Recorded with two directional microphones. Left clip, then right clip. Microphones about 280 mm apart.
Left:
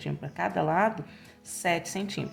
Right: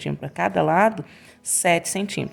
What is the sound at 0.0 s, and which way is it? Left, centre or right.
Speech, right.